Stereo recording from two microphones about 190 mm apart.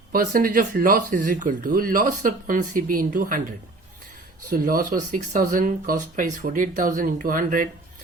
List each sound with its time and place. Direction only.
0.1 s speech: 50° right (ahead or behind)
4.4 s speech: 45° right (ahead or behind)